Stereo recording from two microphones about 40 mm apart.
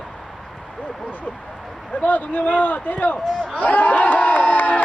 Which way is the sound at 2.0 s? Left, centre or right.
Left.